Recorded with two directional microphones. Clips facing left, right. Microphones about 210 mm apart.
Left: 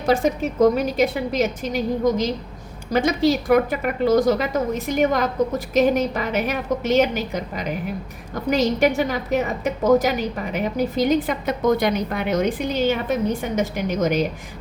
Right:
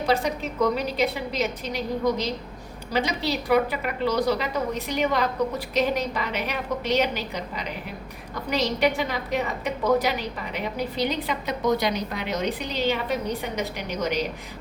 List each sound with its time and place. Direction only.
0.0 s a woman's voice: 45° left (ahead or behind)